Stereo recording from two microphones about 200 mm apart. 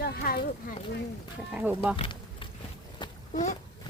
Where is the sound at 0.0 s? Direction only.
50° left (ahead or behind).